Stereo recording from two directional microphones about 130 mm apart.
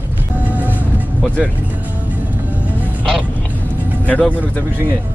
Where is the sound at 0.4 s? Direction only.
15° right (ahead or behind).